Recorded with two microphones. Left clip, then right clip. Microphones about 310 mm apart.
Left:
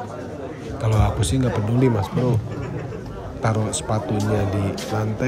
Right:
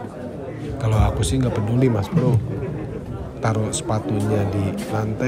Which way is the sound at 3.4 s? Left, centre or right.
Centre.